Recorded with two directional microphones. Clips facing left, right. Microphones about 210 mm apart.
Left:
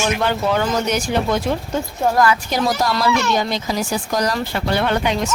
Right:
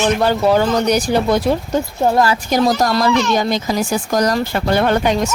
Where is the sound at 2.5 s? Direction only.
45° right (ahead or behind).